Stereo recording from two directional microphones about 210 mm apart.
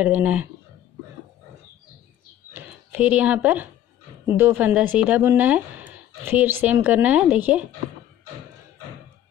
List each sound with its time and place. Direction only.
0.0 s speech: 5° right (ahead or behind)
2.5 s a sound: 5° right (ahead or behind)
4.4 s speech: 10° right (ahead or behind)